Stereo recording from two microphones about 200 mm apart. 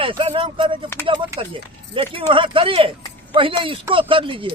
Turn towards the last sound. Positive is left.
turn(degrees=-25)  # may be behind; listen again after turning